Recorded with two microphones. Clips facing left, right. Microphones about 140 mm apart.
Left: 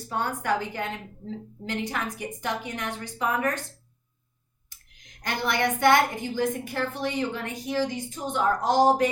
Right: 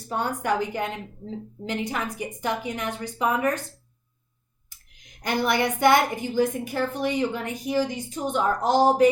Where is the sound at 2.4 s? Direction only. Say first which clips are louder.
Right 3 dB; 10° right (ahead or behind).